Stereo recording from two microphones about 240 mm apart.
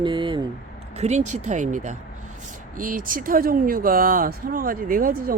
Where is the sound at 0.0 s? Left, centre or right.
Centre.